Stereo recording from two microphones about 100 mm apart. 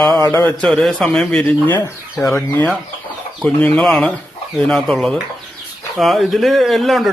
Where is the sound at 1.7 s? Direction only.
25° left (ahead or behind).